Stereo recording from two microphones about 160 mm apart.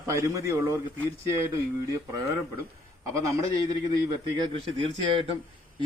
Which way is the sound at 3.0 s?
20° right (ahead or behind).